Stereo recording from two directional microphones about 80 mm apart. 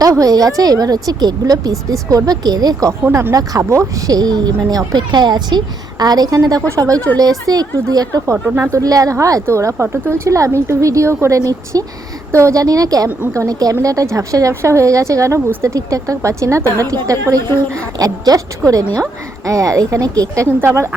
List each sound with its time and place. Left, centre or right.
0.0 s a woman's voice: right
3.1 s a woman's voice: right
4.9 s a woman's voice: right
8.3 s speech: right
8.7 s a woman's voice: right
18.0 s a woman's voice: right